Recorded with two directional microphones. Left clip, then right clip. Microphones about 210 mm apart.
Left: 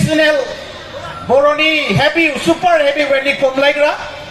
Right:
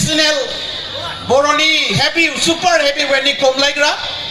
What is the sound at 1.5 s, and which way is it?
A man's voice, 30° left (ahead or behind).